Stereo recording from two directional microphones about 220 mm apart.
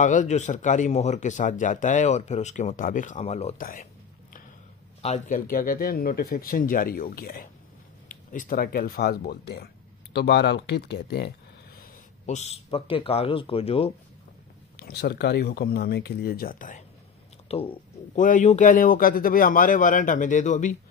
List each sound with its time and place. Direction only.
0.0 s speech: 35° left (ahead or behind)
5.0 s speech: 35° left (ahead or behind)
14.8 s speech: 45° left (ahead or behind)
17.5 s speech: 25° left (ahead or behind)